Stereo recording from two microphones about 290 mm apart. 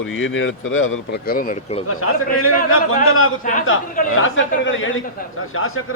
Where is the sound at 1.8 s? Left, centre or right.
Left.